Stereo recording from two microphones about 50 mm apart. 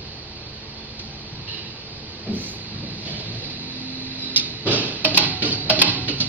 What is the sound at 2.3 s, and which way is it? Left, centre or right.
Vehicle, right.